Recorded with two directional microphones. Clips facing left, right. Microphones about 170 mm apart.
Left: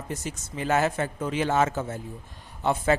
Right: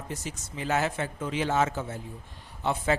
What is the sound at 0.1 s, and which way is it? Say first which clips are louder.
A man's voice: left 4 dB; 50° left (ahead or behind).